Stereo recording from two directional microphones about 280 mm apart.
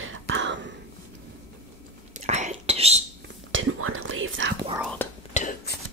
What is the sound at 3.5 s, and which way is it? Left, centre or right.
Whispering, right.